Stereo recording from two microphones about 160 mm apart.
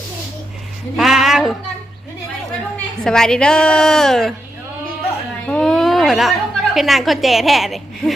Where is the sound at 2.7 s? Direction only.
5° left (ahead or behind).